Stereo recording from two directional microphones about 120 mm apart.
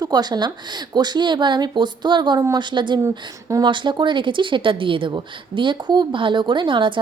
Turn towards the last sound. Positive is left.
turn(degrees=-45)  # may be behind; listen again after turning